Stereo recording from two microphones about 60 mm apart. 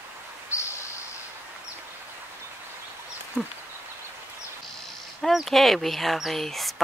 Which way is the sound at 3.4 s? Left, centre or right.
Right.